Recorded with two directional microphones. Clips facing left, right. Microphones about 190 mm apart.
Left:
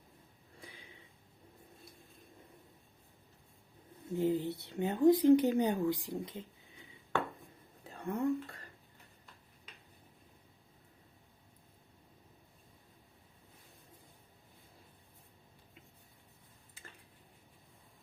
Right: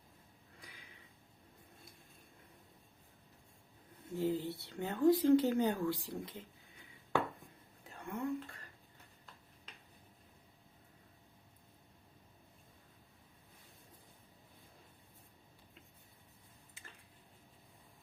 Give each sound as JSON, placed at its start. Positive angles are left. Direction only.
{"t": 4.1, "sound": "speech", "side_deg": 20}
{"t": 7.9, "sound": "speech", "side_deg": 35}